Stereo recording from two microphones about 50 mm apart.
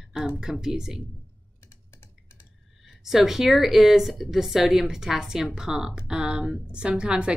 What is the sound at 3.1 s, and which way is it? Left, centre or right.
Speech, centre.